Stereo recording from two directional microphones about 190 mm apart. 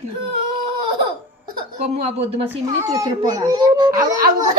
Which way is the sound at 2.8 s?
20° right (ahead or behind).